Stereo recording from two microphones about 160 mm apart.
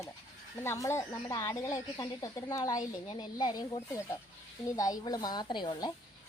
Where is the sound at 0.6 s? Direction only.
15° left (ahead or behind).